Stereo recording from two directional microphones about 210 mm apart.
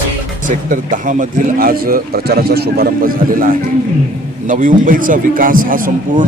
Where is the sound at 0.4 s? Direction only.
40° right (ahead or behind).